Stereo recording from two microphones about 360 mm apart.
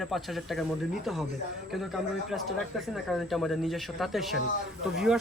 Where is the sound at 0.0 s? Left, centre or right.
Centre.